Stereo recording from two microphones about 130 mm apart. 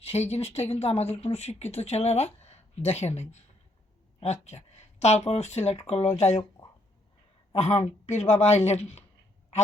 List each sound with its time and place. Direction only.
0.0 s speech: 55° left (ahead or behind)
7.5 s speech: 60° left (ahead or behind)